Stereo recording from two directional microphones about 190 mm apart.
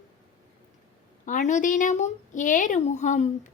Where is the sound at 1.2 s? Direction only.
40° left (ahead or behind).